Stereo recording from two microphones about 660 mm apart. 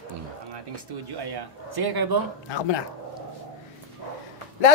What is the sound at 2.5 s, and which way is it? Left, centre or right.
Speech, left.